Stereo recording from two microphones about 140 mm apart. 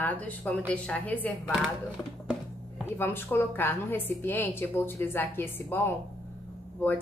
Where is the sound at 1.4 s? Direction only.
Centre (ahead or behind).